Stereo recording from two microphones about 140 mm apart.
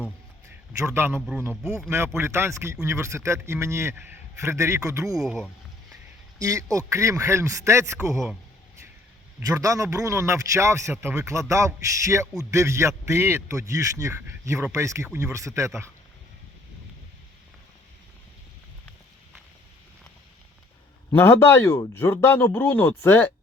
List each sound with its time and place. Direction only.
0.8 s a man's voice: 20° right (ahead or behind)
5.1 s speech: 5° right (ahead or behind)
6.4 s a man's voice: 25° right (ahead or behind)
8.1 s speech: centre (ahead or behind)
9.4 s a man's voice: 25° right (ahead or behind)
21.1 s speech: 15° left (ahead or behind)